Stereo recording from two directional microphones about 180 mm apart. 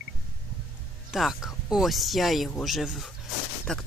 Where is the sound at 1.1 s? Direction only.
Centre (ahead or behind).